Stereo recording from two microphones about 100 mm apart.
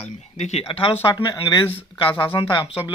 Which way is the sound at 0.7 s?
65° left (ahead or behind).